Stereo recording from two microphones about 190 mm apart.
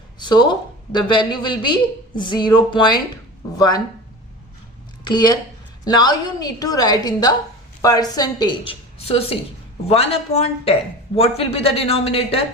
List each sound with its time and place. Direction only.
0.2 s a woman's voice: 25° left (ahead or behind)
5.0 s a woman's voice: 20° left (ahead or behind)